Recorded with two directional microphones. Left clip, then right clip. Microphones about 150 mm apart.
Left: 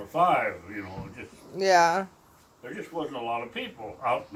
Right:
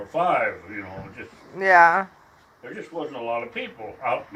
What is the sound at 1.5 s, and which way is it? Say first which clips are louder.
Speech: right 6 dB; 20° left (ahead or behind).